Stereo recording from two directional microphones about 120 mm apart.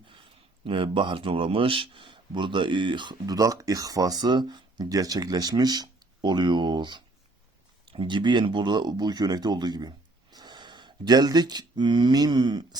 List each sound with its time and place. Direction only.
0.1 s speech: 45° right (ahead or behind)